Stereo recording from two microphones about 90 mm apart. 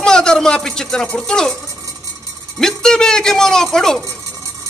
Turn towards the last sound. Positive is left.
turn(degrees=5)  # may be behind; listen again after turning